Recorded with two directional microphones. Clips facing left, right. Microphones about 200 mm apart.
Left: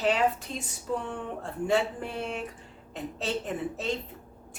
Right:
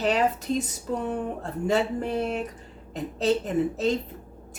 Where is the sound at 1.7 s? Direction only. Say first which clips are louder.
Right 3 dB; 40° right (ahead or behind).